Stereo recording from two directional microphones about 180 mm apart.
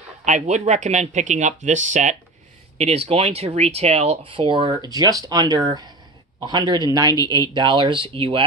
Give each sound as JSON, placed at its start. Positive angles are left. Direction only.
{"t": 0.2, "sound": "a man's voice", "side_deg": -40}